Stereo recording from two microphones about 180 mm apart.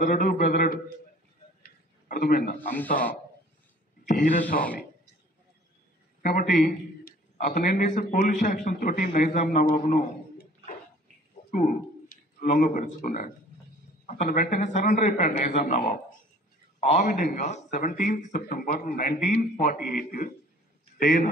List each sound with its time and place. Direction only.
0.0 s a man's voice: 50° left (ahead or behind)
1.6 s a sound: 55° left (ahead or behind)
4.0 s a man's voice: 45° left (ahead or behind)
6.2 s a man's voice: 50° left (ahead or behind)
19.6 s a man's voice: 50° left (ahead or behind)